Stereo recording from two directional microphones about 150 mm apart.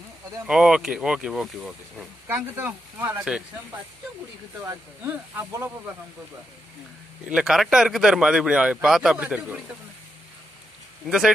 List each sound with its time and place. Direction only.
0.5 s speech: 5° right (ahead or behind)
2.2 s speech: 15° right (ahead or behind)
4.6 s speech: 15° right (ahead or behind)
7.2 s speech: 5° right (ahead or behind)
11.1 s speech: 5° right (ahead or behind)